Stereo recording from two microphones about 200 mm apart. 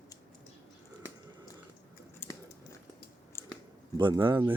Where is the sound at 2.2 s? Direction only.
10° left (ahead or behind).